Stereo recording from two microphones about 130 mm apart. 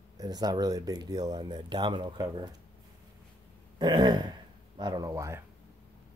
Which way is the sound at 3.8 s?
35° right (ahead or behind).